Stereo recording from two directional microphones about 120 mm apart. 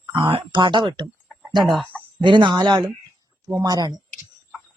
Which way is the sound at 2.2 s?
40° right (ahead or behind).